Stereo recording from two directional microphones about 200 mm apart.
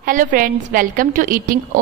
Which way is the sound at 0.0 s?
45° right (ahead or behind).